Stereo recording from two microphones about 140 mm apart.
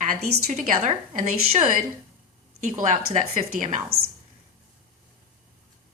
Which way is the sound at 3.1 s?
80° right.